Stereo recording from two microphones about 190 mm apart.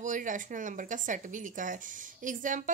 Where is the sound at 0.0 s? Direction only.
45° right (ahead or behind).